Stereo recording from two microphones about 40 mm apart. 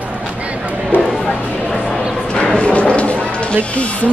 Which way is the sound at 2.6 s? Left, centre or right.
Left.